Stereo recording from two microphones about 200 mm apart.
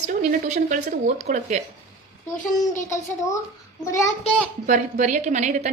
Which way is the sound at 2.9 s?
15° left (ahead or behind).